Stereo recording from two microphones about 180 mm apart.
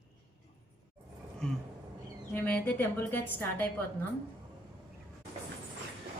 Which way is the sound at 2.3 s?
10° left (ahead or behind).